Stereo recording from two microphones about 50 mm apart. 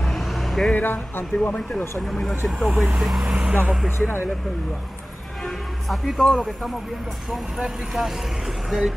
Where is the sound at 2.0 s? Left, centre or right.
Centre.